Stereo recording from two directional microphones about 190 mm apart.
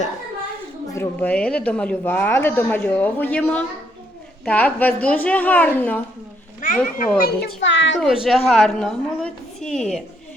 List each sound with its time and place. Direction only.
0.9 s speech: 5° left (ahead or behind)
6.6 s a child's voice: 45° left (ahead or behind); by 7.9 s 75° left (ahead or behind)
8.0 s a woman's voice: centre (ahead or behind)